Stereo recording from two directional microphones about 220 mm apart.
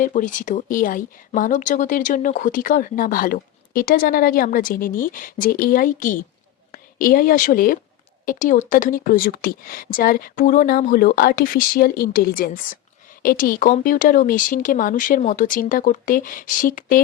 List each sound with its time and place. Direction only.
0.0 s a woman's voice: 35° left (ahead or behind)